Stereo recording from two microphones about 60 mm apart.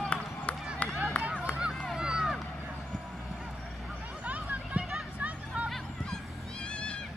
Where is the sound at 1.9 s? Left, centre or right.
Centre.